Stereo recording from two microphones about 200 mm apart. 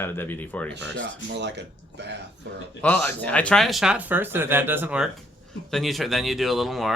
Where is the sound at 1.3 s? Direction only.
60° right (ahead or behind).